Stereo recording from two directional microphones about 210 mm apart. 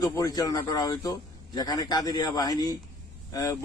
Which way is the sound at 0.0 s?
15° left (ahead or behind).